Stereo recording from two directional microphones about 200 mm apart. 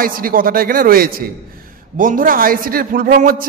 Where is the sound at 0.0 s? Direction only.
45° right (ahead or behind).